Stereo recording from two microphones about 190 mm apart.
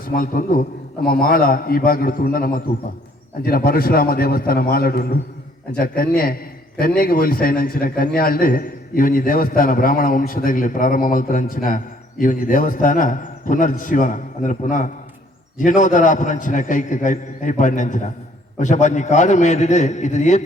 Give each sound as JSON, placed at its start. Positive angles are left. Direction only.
{"t": 0.0, "sound": "a man's voice", "side_deg": 45}
{"t": 6.7, "sound": "a man's voice", "side_deg": 50}